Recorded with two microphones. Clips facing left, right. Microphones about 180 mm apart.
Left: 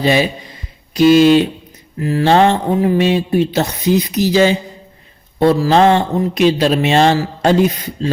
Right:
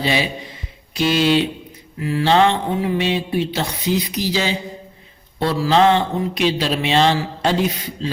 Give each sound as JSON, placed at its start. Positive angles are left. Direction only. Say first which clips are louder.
{"t": 0.0, "sound": "speech", "louder": "left 6 dB", "side_deg": 45}